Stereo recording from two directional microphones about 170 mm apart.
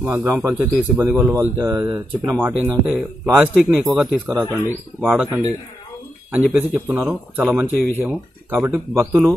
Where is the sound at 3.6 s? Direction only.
Centre (ahead or behind).